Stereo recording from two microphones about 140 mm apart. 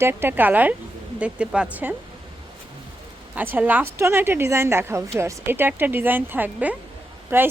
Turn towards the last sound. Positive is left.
turn(degrees=-15)  # may be behind; listen again after turning